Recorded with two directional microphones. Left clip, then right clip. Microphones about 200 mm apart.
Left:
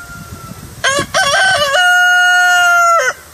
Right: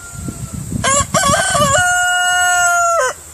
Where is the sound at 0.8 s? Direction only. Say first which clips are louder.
Left 1 dB; 5° right (ahead or behind).